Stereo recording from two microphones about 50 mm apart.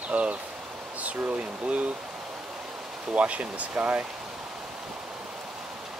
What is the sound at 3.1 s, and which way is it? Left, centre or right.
Speech, right.